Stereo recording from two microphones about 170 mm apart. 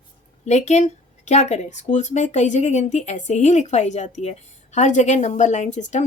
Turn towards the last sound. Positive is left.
turn(degrees=45)  # may be behind; listen again after turning